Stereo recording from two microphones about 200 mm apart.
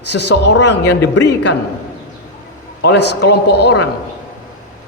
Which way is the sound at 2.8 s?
55° left (ahead or behind).